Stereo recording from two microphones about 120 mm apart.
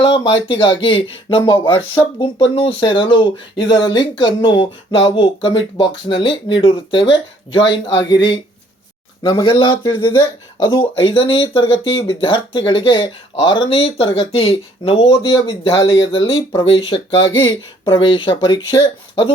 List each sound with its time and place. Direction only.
0.0 s speech: 50° left (ahead or behind)
10.8 s speech: 45° left (ahead or behind)